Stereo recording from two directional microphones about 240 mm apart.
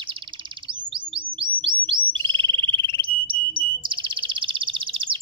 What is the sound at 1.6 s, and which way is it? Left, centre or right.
Bird, centre.